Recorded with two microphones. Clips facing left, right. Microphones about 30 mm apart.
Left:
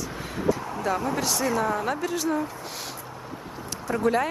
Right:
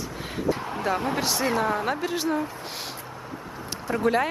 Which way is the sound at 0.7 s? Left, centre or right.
Right.